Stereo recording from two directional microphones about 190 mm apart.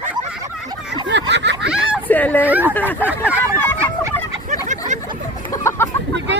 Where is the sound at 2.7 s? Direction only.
10° left (ahead or behind).